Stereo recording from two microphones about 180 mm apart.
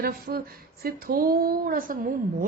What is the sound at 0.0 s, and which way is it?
Speech, 55° right (ahead or behind).